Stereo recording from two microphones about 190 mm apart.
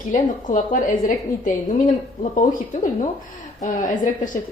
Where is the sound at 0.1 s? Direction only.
40° left (ahead or behind).